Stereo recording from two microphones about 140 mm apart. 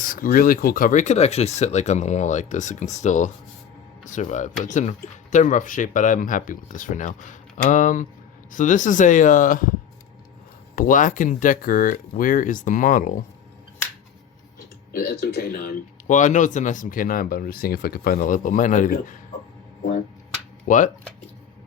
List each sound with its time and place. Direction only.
0.0 s speech: 80° left
10.8 s speech: 75° left (ahead or behind)
14.9 s speech: 90° left; by 19.1 s 70° left (ahead or behind)
20.7 s speech: 65° left (ahead or behind)